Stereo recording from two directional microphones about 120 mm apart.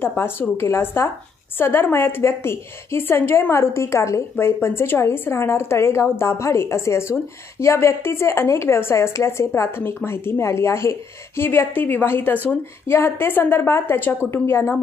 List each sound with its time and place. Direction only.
0.0 s a woman's voice: 20° left (ahead or behind)